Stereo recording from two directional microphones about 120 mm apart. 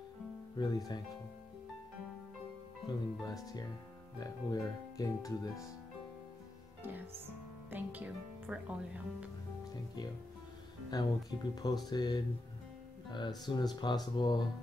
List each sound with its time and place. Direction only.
0.6 s speech: 35° left (ahead or behind)
2.9 s speech: 35° left (ahead or behind)
7.7 s speech: 15° right (ahead or behind)
10.9 s speech: 35° left (ahead or behind)